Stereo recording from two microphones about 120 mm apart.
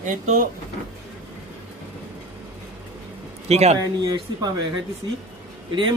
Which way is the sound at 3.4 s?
65° right (ahead or behind).